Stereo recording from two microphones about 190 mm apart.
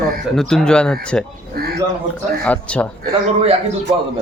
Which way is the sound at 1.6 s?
55° right (ahead or behind).